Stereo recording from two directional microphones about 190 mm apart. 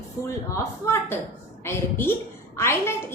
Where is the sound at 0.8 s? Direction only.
15° left (ahead or behind).